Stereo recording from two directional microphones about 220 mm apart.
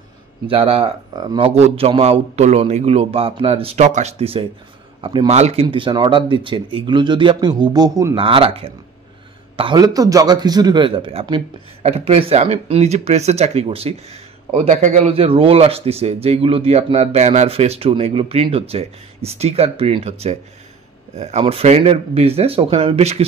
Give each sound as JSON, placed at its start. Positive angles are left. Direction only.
{"t": 0.5, "sound": "speech", "side_deg": -25}